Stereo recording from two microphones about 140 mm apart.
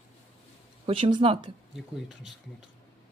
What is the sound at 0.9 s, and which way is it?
Speech, 40° right (ahead or behind).